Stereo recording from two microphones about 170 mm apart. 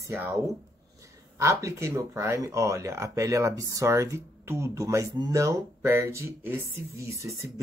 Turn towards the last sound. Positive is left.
turn(degrees=-15)  # may be behind; listen again after turning